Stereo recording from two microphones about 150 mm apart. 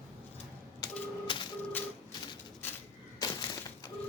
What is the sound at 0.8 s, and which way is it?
Typewriter, 25° left (ahead or behind).